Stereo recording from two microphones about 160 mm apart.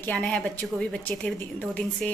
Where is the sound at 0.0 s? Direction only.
10° left (ahead or behind).